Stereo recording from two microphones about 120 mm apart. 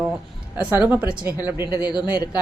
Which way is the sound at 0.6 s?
10° right (ahead or behind).